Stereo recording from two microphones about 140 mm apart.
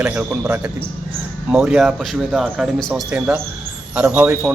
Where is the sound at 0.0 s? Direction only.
10° right (ahead or behind).